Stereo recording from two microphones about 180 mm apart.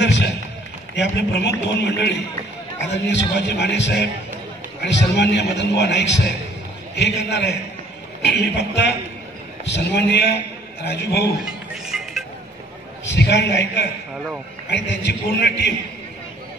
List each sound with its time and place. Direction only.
0.0 s a sound: 80° left
0.9 s a man's voice: 70° left (ahead or behind)
11.4 s music: centre (ahead or behind)
13.1 s a man's voice: 70° left (ahead or behind)